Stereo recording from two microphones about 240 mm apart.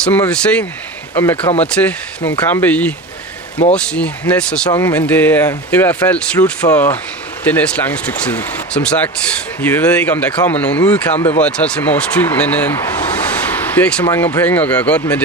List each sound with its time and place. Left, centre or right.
0.0 s speech: centre
1.3 s speech: left
1.7 s speech: centre
4.6 s speech: centre
13.5 s a sound: centre
14.0 s speech: centre